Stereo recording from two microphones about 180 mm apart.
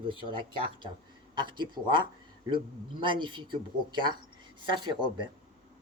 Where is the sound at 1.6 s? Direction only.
25° right (ahead or behind).